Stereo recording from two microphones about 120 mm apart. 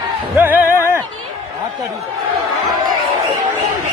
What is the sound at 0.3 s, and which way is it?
Music, 15° right (ahead or behind).